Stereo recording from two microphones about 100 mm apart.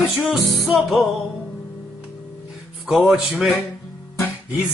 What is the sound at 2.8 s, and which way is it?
Speech, 5° right (ahead or behind).